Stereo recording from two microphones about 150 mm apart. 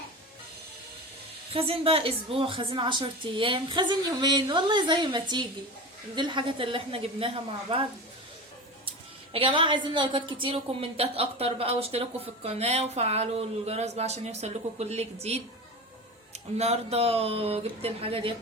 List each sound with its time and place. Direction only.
1.5 s a woman's voice: 40° right (ahead or behind)
9.3 s a woman's voice: 35° right (ahead or behind)